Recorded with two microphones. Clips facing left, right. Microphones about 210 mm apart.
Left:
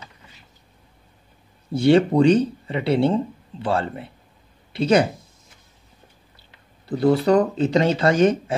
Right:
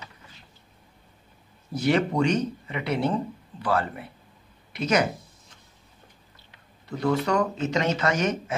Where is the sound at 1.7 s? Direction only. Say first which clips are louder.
Left 7 dB; 30° left (ahead or behind).